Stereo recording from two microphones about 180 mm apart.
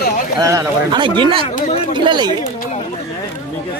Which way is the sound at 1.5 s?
35° left (ahead or behind).